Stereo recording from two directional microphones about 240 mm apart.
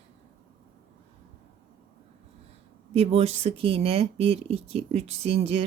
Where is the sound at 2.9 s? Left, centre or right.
Right.